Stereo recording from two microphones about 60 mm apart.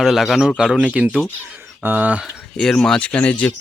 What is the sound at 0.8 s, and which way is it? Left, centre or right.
Speech, centre.